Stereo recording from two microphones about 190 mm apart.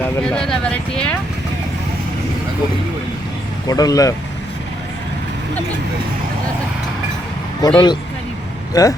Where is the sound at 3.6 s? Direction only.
20° left (ahead or behind).